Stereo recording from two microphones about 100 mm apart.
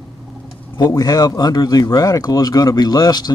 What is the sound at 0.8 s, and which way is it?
Speech, 40° left (ahead or behind).